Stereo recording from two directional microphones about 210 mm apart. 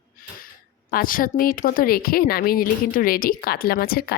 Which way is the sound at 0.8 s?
45° left (ahead or behind).